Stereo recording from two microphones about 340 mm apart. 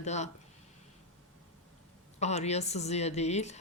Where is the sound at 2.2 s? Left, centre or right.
Centre.